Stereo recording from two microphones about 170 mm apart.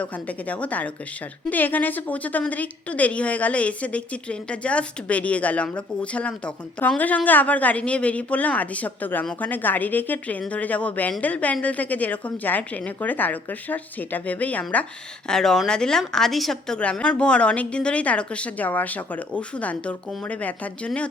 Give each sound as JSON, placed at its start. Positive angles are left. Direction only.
{"t": 0.0, "sound": "a woman's voice", "side_deg": 10}